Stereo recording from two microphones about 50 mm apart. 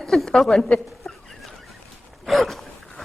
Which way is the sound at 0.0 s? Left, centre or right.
Centre.